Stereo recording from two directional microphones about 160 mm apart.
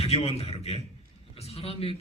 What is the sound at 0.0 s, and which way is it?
A man's voice, 40° left (ahead or behind).